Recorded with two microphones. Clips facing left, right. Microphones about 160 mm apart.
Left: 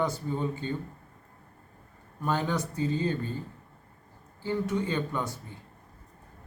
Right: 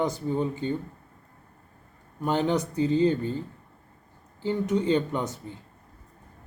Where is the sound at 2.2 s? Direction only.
20° right (ahead or behind).